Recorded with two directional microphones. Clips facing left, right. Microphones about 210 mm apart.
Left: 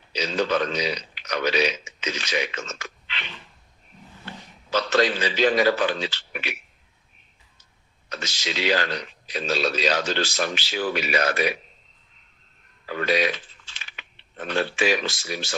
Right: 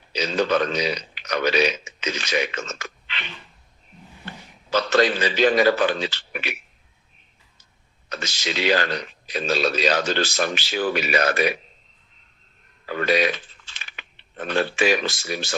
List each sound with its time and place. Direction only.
0.1 s speech: 50° right (ahead or behind)
4.7 s speech: 50° right (ahead or behind)
8.1 s speech: 50° right (ahead or behind)
12.9 s speech: 50° right (ahead or behind)